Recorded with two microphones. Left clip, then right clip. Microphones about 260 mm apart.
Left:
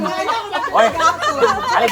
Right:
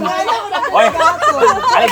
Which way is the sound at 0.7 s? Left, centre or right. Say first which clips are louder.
Right 2 dB; right.